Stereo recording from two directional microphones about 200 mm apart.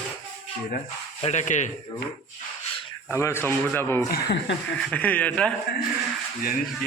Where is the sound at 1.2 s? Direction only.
35° left (ahead or behind).